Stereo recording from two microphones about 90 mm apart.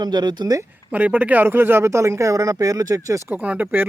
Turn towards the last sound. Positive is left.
turn(degrees=-20)  # may be behind; listen again after turning